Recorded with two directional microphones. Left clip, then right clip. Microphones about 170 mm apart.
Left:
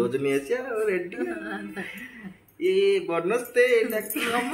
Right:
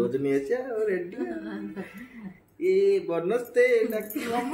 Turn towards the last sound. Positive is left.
turn(degrees=0)  # may be behind; listen again after turning